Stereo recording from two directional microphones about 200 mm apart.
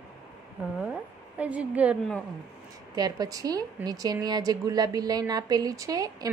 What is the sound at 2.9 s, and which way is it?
A woman's voice, 20° right (ahead or behind).